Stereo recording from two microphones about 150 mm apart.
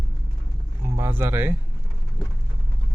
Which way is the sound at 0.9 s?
15° right (ahead or behind).